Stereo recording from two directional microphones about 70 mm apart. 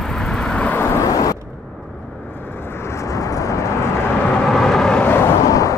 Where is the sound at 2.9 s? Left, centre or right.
Left.